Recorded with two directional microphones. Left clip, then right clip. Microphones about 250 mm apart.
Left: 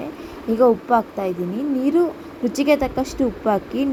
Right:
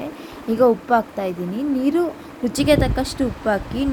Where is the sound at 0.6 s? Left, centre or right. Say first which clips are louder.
Even; centre.